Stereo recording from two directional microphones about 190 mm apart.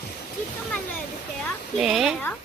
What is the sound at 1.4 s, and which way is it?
Speech, centre (ahead or behind).